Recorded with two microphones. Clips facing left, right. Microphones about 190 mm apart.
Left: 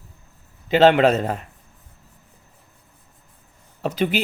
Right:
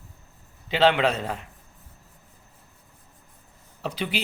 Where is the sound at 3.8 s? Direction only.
45° left (ahead or behind).